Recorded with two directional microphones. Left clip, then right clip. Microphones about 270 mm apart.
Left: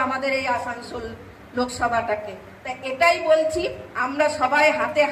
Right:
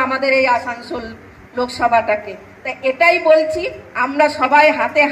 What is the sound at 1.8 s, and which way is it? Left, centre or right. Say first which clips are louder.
A woman's voice: right 9 dB; right.